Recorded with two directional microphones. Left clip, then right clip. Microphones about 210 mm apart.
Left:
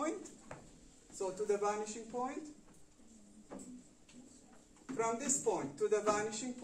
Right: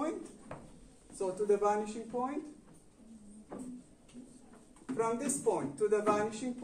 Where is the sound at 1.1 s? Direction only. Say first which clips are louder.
Right 5 dB; centre (ahead or behind).